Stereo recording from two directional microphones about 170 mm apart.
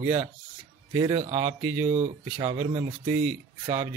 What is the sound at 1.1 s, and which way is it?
Speech, 40° right (ahead or behind).